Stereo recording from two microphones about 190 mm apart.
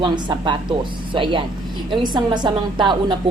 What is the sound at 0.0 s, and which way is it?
A woman's voice, 25° right (ahead or behind).